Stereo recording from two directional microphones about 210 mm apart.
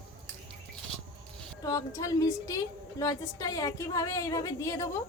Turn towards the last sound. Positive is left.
turn(degrees=15)  # may be behind; listen again after turning